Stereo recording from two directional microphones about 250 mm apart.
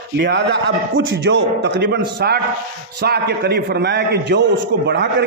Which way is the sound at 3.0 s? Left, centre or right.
Right.